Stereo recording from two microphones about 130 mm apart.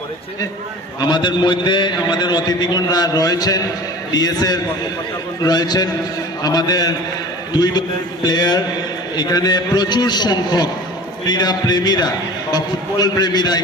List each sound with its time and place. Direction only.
0.9 s a man's voice: 35° left (ahead or behind)